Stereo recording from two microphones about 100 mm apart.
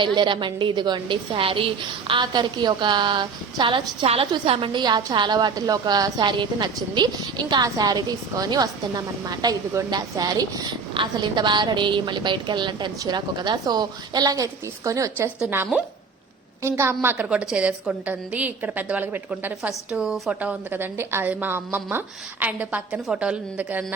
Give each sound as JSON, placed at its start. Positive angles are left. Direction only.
{"t": 0.0, "sound": "a woman's voice", "side_deg": -50}
{"t": 2.2, "sound": "a woman's voice", "side_deg": -45}
{"t": 4.0, "sound": "a woman's voice", "side_deg": -80}
{"t": 4.4, "sound": "a woman's voice", "side_deg": -65}
{"t": 10.9, "sound": "a woman's voice", "side_deg": -50}
{"t": 16.6, "sound": "a woman's voice", "side_deg": -25}
{"t": 17.2, "sound": "a woman's voice", "side_deg": -10}
{"t": 19.9, "sound": "a woman's voice", "side_deg": -5}
{"t": 20.4, "sound": "a woman's voice", "side_deg": -20}